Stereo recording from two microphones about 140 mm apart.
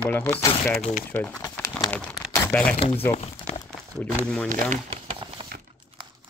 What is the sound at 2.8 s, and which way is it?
Speech, 40° left (ahead or behind).